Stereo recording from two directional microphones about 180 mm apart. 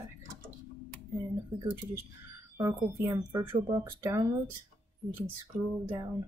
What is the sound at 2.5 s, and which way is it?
Speech, 15° right (ahead or behind).